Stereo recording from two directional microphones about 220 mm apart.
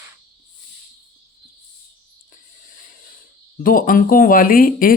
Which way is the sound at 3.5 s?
40° left (ahead or behind).